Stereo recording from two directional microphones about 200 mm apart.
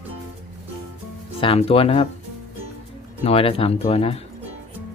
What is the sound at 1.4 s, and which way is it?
Speech, 30° left (ahead or behind).